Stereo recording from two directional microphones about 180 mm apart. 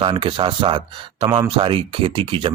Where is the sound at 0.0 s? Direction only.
30° right (ahead or behind).